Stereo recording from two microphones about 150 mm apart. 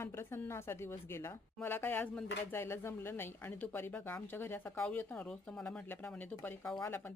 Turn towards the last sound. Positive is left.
turn(degrees=15)  # may be behind; listen again after turning